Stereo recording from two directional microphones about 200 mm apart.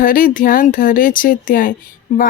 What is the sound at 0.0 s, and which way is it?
Speech, 45° left (ahead or behind).